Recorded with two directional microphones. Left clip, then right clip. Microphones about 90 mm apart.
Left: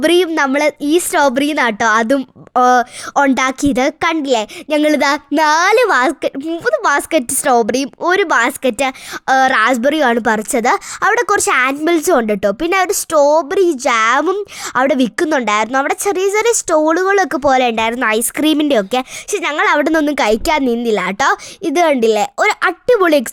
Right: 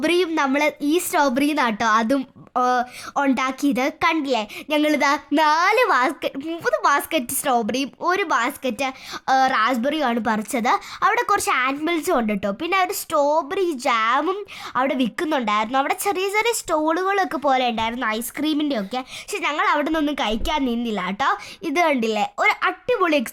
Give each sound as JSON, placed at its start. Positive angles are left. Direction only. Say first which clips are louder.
{"t": 0.0, "sound": "speech", "louder": "left 7 dB", "side_deg": 20}
{"t": 2.5, "sound": "speech", "louder": "left 9 dB", "side_deg": 40}
{"t": 6.3, "sound": "a woman's voice", "louder": "left 6 dB", "side_deg": 5}
{"t": 6.8, "sound": "speech", "louder": "left 4 dB", "side_deg": 25}
{"t": 9.2, "sound": "speech", "louder": "left 6 dB", "side_deg": 30}
{"t": 9.6, "sound": "speech", "louder": "left 8 dB", "side_deg": 40}
{"t": 11.1, "sound": "speech", "louder": "left 8 dB", "side_deg": 30}
{"t": 15.8, "sound": "speech", "louder": "left 6 dB", "side_deg": 25}
{"t": 19.3, "sound": "speech", "louder": "left 6 dB", "side_deg": 30}
{"t": 19.8, "sound": "a woman's voice", "louder": "left 8 dB", "side_deg": 50}
{"t": 21.6, "sound": "speech", "louder": "left 8 dB", "side_deg": 30}